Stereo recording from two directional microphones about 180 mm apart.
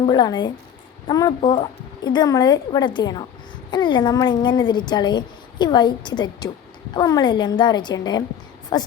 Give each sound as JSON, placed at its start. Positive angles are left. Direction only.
{"t": 0.0, "sound": "speech", "side_deg": 25}